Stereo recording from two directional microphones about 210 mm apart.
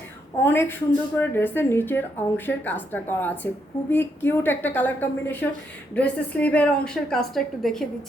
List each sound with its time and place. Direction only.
0.4 s a woman's voice: 10° left (ahead or behind)